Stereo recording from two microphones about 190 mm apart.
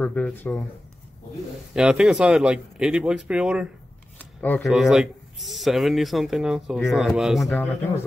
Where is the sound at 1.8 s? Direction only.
5° right (ahead or behind).